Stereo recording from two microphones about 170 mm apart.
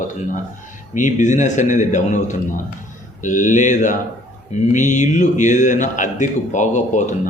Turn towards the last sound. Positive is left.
turn(degrees=45)  # may be behind; listen again after turning